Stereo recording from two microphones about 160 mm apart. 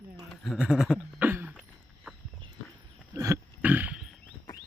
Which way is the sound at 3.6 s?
10° right (ahead or behind).